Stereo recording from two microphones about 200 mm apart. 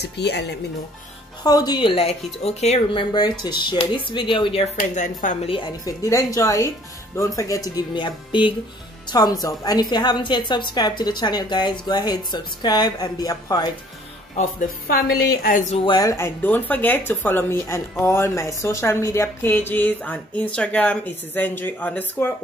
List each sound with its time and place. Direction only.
0.0 s speech: 55° left (ahead or behind)
1.4 s a woman's voice: 20° left (ahead or behind)
4.7 s speech: 40° left (ahead or behind)
5.5 s a woman's voice: 20° left (ahead or behind)
14.3 s speech: 45° left (ahead or behind)
15.8 s speech: 20° left (ahead or behind)